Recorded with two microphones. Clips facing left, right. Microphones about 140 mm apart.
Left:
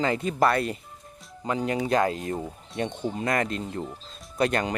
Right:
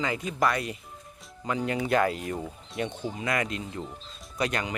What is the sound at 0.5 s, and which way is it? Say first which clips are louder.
Speech: left 5 dB; 55° left (ahead or behind).